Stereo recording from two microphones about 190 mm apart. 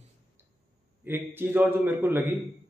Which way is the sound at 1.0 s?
10° right (ahead or behind).